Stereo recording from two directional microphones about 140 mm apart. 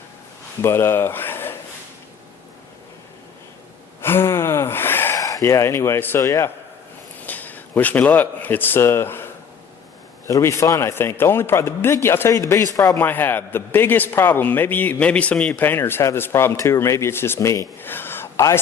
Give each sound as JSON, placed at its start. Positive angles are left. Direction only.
{"t": 0.6, "sound": "speech", "side_deg": 15}
{"t": 4.0, "sound": "a sound", "side_deg": 15}
{"t": 7.2, "sound": "speech", "side_deg": 10}
{"t": 13.1, "sound": "a man's voice", "side_deg": 15}